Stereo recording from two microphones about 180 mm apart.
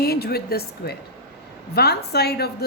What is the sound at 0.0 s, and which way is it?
A woman's voice, 60° left (ahead or behind).